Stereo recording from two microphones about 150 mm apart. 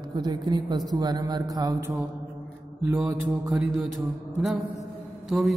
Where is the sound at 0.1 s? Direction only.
30° right (ahead or behind).